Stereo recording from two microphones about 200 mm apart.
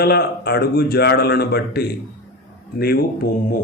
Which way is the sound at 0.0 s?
55° left (ahead or behind).